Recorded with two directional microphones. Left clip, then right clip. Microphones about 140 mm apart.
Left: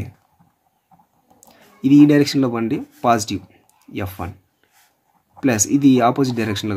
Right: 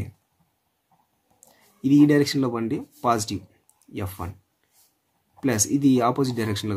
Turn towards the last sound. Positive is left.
turn(degrees=20)  # may be behind; listen again after turning